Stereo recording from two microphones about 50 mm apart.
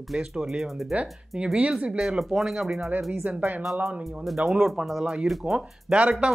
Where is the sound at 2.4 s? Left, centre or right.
Centre.